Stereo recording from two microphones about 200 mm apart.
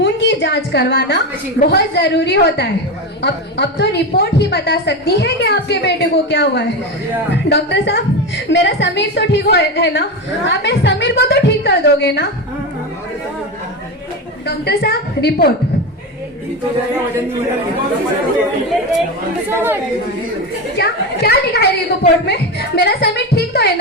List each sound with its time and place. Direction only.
0.0 s a woman's voice: 65° left (ahead or behind)
14.4 s a woman's voice: 55° left (ahead or behind)
19.5 s speech: 10° right (ahead or behind)
20.7 s a woman's voice: 55° left (ahead or behind)